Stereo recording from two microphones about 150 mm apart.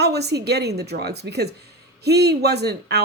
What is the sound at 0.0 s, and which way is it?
A woman's voice, 90° right.